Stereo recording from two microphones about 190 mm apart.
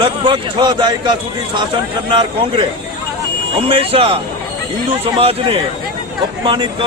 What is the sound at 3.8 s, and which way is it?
A man's voice, 30° right (ahead or behind).